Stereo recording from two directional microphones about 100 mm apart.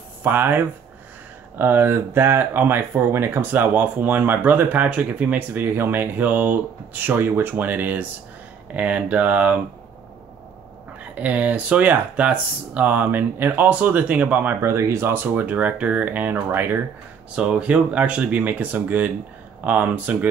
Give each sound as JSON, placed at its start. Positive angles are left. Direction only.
{"t": 0.2, "sound": "speech", "side_deg": -20}
{"t": 11.1, "sound": "speech", "side_deg": -15}
{"t": 17.4, "sound": "speech", "side_deg": -10}